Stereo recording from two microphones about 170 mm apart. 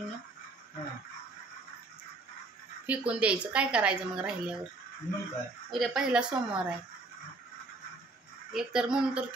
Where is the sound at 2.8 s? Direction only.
5° right (ahead or behind).